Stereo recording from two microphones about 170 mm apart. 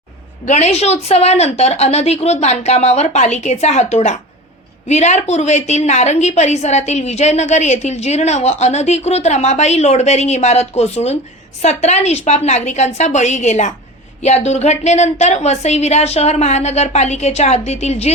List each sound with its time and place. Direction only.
0.4 s a woman's voice: 40° left (ahead or behind)